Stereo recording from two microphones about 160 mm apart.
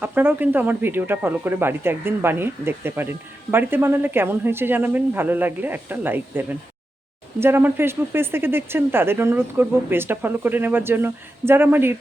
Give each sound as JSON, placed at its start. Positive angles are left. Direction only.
{"t": 0.0, "sound": "speech", "side_deg": -10}